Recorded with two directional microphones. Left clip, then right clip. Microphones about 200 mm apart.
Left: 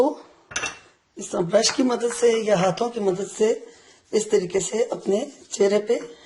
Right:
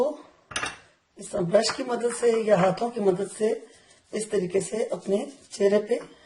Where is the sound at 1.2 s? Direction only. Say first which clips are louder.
Left 2 dB; 45° left (ahead or behind).